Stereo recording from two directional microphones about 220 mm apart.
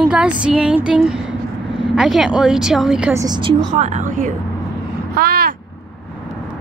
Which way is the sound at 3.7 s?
35° right (ahead or behind).